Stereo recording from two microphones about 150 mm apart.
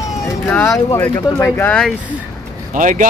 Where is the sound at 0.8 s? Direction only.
20° left (ahead or behind).